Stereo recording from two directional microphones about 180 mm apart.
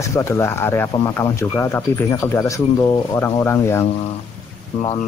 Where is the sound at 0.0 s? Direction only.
15° left (ahead or behind).